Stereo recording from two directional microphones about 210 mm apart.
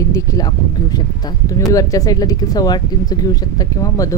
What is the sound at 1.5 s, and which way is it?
Speech, 15° left (ahead or behind).